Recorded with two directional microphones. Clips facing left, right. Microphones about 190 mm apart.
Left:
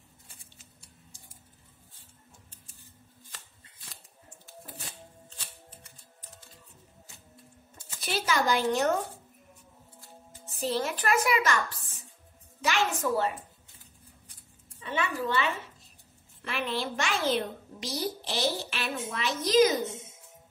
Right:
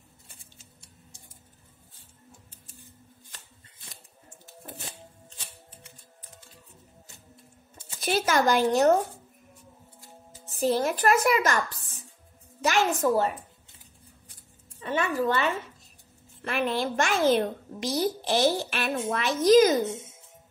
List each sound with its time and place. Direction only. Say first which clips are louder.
8.0 s a child's voice: right 5 dB; 45° right (ahead or behind)
10.6 s a child's voice: right 6 dB; 45° right (ahead or behind)
12.6 s a child's voice: right 5 dB; 45° right (ahead or behind)
14.8 s a woman's voice: right 5 dB; 45° right (ahead or behind)